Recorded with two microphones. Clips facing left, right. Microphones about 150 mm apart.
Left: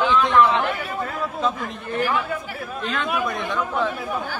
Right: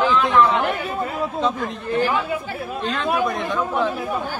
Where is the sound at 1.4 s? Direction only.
Centre (ahead or behind).